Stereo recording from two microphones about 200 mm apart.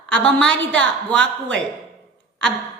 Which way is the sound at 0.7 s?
5° left (ahead or behind).